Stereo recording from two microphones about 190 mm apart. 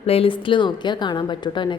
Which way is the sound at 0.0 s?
30° left (ahead or behind).